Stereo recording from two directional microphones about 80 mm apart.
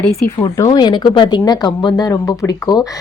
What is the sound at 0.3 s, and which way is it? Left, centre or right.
A woman's voice, left.